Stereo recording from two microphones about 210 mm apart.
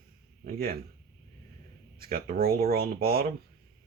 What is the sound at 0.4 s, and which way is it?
Speech, 45° right (ahead or behind).